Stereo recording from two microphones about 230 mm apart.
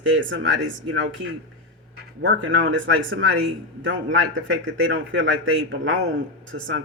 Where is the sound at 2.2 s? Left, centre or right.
Right.